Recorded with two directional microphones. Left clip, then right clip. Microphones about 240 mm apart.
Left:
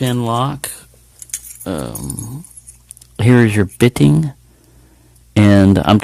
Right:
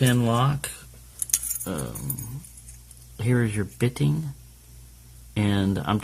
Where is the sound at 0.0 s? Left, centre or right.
Left.